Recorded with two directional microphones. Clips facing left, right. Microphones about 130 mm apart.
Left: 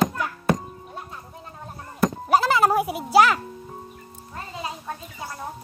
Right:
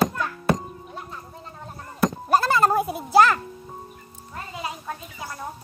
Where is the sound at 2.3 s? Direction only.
15° left (ahead or behind).